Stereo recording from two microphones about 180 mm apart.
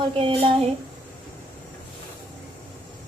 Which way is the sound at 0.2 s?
30° right (ahead or behind).